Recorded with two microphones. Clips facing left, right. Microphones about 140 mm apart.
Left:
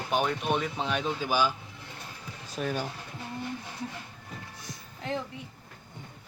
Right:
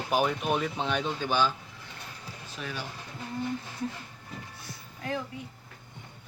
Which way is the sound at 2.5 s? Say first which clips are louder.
Left 7 dB; 45° left (ahead or behind).